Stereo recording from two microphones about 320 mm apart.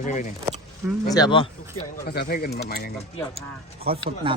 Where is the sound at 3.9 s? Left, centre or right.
Centre.